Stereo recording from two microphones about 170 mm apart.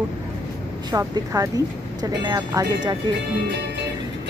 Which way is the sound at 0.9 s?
20° right (ahead or behind).